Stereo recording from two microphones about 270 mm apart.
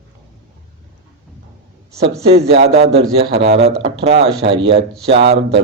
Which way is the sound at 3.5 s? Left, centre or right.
Right.